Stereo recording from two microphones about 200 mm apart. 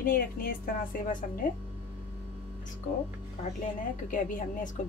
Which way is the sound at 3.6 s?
40° left (ahead or behind).